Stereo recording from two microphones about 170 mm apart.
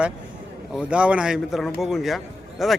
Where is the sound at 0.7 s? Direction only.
5° right (ahead or behind).